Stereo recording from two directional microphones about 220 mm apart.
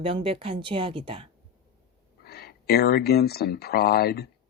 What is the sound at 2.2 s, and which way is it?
Speech, 45° left (ahead or behind).